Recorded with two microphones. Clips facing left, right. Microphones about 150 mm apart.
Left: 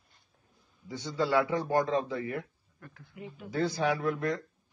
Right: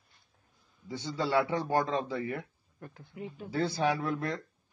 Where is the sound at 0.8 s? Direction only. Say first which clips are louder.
Left 2 dB; 30° right (ahead or behind).